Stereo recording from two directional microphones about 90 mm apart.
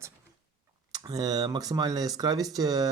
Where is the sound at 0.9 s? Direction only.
45° right (ahead or behind).